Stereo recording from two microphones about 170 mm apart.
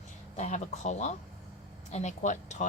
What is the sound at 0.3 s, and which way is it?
Speech, 45° left (ahead or behind).